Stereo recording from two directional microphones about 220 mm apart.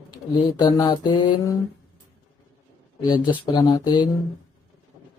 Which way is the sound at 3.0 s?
20° left (ahead or behind).